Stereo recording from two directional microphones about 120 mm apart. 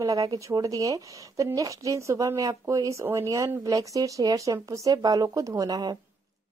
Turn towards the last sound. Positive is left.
turn(degrees=-30)  # may be behind; listen again after turning